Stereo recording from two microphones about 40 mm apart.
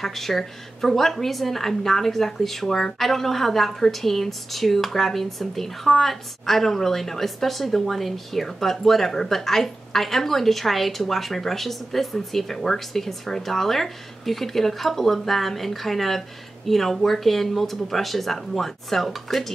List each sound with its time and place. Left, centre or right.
0.0 s a woman's voice: centre